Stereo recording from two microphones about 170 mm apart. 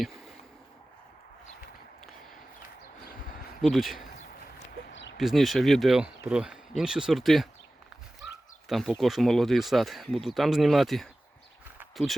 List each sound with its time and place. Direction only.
3.6 s speech: centre (ahead or behind)
4.9 s a sound: 90° left
5.1 s speech: centre (ahead or behind)
8.7 s speech: centre (ahead or behind)